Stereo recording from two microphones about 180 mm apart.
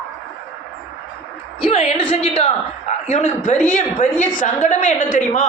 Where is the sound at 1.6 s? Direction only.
35° left (ahead or behind).